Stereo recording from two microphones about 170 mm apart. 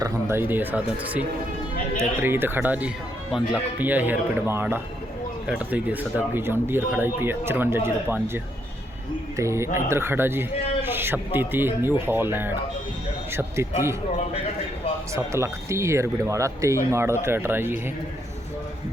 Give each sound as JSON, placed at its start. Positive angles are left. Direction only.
{"t": 0.0, "sound": "speech", "side_deg": -15}
{"t": 9.4, "sound": "speech", "side_deg": -15}
{"t": 10.8, "sound": "a sound", "side_deg": -15}
{"t": 11.3, "sound": "speech", "side_deg": -15}
{"t": 15.1, "sound": "speech", "side_deg": -15}